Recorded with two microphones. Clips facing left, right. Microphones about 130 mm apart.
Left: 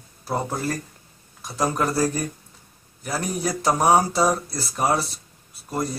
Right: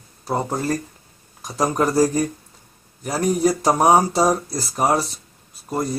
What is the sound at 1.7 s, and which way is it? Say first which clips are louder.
Speech: right 8 dB; 35° right (ahead or behind).